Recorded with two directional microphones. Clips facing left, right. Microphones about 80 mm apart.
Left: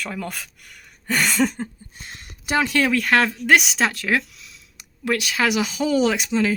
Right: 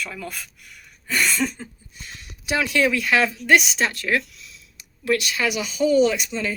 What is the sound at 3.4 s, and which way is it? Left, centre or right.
Speech, left.